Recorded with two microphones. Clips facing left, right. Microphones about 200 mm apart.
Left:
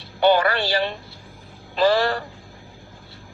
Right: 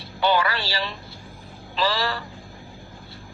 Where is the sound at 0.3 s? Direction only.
50° left (ahead or behind).